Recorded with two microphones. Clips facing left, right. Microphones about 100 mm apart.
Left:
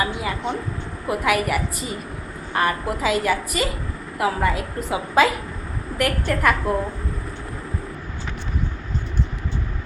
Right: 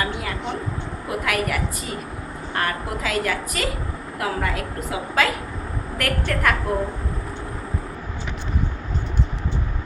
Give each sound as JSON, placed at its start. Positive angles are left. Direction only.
{"t": 0.0, "sound": "a woman's voice", "side_deg": 10}
{"t": 6.0, "sound": "a woman's voice", "side_deg": 5}